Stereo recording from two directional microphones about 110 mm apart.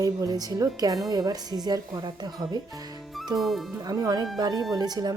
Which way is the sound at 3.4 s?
Centre (ahead or behind).